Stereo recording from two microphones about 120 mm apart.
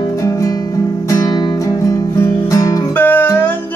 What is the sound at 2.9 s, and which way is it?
Music, 15° left (ahead or behind).